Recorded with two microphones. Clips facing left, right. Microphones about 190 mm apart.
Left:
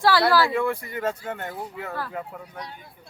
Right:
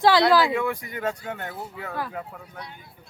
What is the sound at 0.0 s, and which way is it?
Speech, 20° right (ahead or behind).